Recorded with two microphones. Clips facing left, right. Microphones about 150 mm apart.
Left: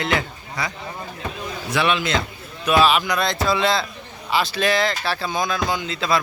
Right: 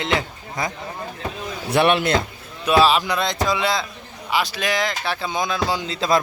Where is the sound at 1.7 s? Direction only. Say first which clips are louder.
Right 4 dB; 55° right (ahead or behind).